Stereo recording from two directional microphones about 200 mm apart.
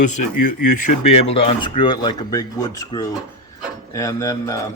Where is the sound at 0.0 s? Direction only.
40° left (ahead or behind).